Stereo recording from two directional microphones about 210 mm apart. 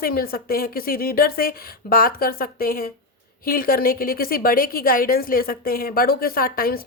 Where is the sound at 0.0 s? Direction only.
45° left (ahead or behind).